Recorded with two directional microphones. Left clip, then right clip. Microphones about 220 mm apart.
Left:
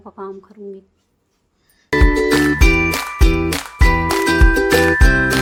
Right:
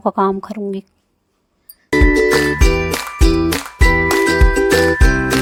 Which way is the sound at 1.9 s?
Centre (ahead or behind).